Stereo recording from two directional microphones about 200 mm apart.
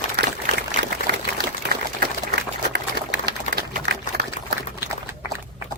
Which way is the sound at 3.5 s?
35° left (ahead or behind).